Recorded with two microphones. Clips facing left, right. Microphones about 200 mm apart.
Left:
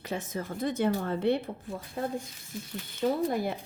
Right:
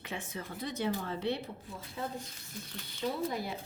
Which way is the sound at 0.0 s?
40° left (ahead or behind).